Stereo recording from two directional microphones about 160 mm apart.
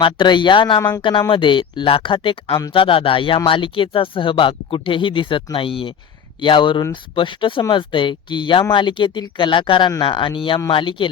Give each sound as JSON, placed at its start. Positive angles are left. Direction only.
{"t": 0.0, "sound": "speech", "side_deg": 30}
{"t": 0.8, "sound": "speech", "side_deg": 20}
{"t": 1.3, "sound": "speech", "side_deg": 30}